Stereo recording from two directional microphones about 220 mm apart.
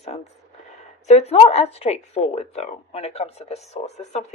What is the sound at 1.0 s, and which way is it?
Speech, 30° left (ahead or behind).